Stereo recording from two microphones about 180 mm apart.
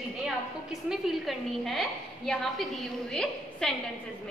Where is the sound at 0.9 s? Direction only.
Centre (ahead or behind).